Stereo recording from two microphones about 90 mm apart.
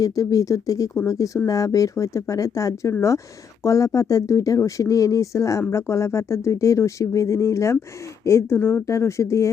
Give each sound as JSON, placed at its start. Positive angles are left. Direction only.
{"t": 0.0, "sound": "speech", "side_deg": 40}